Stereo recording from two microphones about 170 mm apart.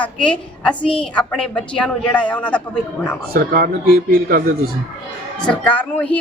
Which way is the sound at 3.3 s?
65° right (ahead or behind).